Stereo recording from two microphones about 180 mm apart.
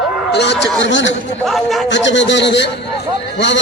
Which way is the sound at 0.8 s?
90° left.